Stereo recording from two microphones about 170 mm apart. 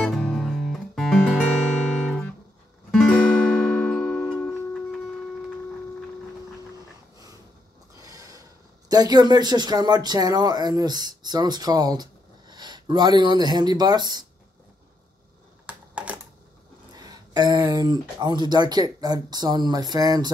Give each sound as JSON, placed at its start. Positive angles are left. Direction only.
{"t": 0.0, "sound": "music", "side_deg": 0}
{"t": 7.9, "sound": "speech", "side_deg": -20}
{"t": 15.6, "sound": "computer keyboard", "side_deg": -10}
{"t": 16.9, "sound": "speech", "side_deg": -25}